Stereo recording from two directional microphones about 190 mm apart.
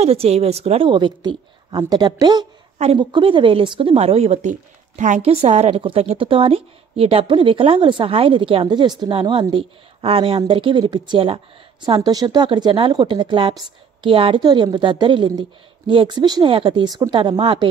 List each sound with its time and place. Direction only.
0.0 s a woman's voice: 30° right (ahead or behind)